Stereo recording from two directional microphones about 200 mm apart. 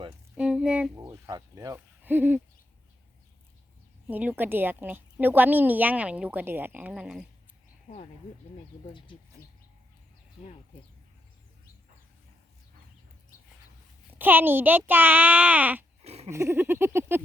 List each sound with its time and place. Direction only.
0.3 s a sound: 5° right (ahead or behind)
0.9 s speech: 20° right (ahead or behind)
4.0 s a woman's voice: 10° right (ahead or behind)
8.9 s speech: 25° left (ahead or behind)
14.1 s a woman's voice: 10° right (ahead or behind)
16.0 s a sound: 30° right (ahead or behind)
16.3 s a woman's voice: 10° right (ahead or behind)